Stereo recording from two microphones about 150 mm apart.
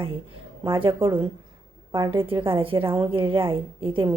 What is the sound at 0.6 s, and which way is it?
A woman's voice, 35° right (ahead or behind).